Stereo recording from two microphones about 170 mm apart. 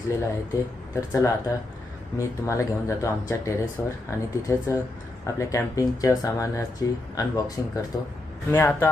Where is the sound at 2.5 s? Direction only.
15° left (ahead or behind).